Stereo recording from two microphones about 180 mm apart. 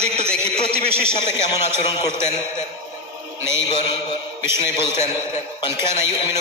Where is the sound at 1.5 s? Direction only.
20° left (ahead or behind).